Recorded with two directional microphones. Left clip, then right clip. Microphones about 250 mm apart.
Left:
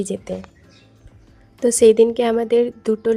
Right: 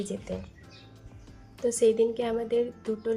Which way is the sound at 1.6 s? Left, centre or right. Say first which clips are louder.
Left 11 dB; left.